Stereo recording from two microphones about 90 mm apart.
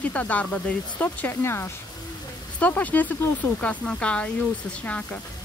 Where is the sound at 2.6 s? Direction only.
15° left (ahead or behind).